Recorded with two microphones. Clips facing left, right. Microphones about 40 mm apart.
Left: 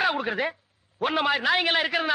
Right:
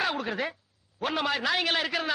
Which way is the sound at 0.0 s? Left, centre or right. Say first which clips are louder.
Left 4 dB; left.